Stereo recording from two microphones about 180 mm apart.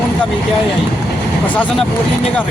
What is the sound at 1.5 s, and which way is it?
Speech, 10° left (ahead or behind).